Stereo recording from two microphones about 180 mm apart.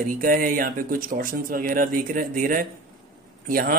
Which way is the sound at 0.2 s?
50° right (ahead or behind).